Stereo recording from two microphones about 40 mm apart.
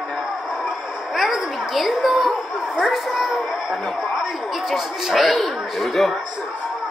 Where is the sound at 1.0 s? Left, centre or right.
Centre.